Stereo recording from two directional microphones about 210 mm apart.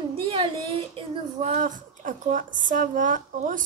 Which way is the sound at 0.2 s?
25° right (ahead or behind).